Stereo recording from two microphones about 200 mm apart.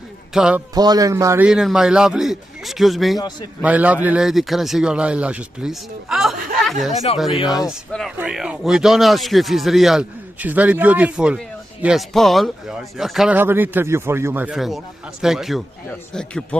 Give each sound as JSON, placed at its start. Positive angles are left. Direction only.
{"t": 0.3, "sound": "speech", "side_deg": -5}
{"t": 0.7, "sound": "a man's voice", "side_deg": -20}
{"t": 1.5, "sound": "speech", "side_deg": -5}